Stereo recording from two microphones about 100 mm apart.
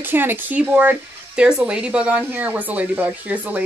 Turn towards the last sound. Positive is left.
turn(degrees=-15)  # may be behind; listen again after turning